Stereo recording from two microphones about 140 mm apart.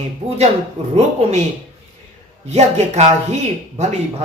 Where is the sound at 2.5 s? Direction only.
50° right (ahead or behind).